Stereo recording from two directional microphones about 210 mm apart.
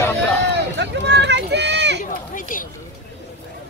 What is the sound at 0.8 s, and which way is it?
Speech, 55° right (ahead or behind).